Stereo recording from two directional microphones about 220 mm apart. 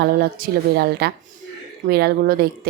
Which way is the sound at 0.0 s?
45° right (ahead or behind).